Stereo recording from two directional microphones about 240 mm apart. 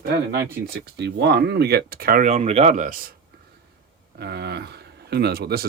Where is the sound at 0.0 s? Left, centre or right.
Right.